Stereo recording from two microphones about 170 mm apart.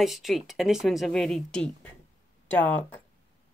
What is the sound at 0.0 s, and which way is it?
A woman's voice, centre (ahead or behind).